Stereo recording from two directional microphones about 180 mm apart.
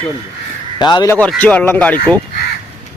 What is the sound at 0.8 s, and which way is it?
Speech, 25° left (ahead or behind).